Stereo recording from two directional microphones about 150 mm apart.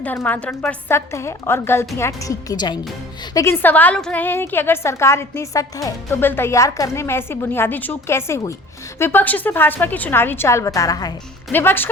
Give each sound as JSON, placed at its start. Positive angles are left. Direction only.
{"t": 0.0, "sound": "a woman's voice", "side_deg": 10}
{"t": 3.3, "sound": "a woman's voice", "side_deg": 15}
{"t": 11.5, "sound": "a woman's voice", "side_deg": 15}